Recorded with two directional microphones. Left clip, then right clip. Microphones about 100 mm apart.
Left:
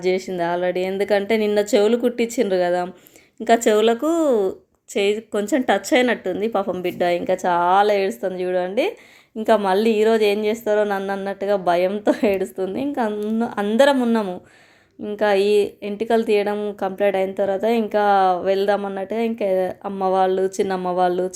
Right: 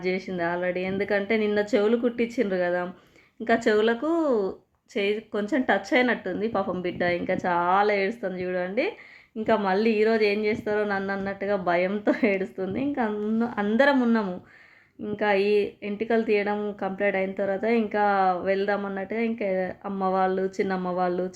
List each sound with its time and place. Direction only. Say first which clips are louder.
0.3 s a woman's voice: left 6 dB; 30° left (ahead or behind)
6.5 s a woman's voice: left 5 dB; 20° left (ahead or behind)